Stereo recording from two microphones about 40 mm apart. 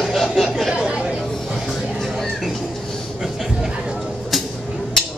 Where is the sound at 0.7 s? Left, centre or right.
Right.